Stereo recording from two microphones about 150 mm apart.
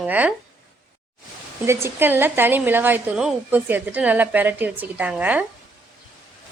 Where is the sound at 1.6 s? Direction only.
15° right (ahead or behind).